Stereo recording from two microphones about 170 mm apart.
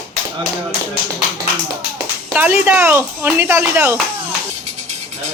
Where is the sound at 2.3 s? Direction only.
10° right (ahead or behind).